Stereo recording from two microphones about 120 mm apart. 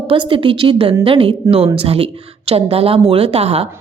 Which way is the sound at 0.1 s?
45° right (ahead or behind).